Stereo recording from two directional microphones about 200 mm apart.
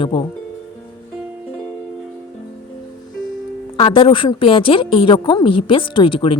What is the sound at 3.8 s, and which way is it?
A woman's voice, 25° left (ahead or behind).